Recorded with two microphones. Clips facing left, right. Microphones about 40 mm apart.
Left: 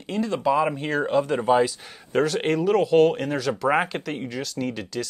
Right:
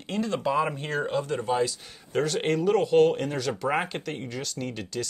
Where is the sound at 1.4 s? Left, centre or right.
Left.